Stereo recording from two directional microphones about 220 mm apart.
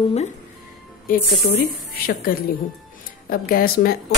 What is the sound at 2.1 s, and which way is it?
Speech, 40° left (ahead or behind).